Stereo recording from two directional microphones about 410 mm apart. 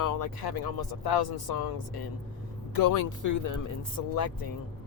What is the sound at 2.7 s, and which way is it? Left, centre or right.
Speech, left.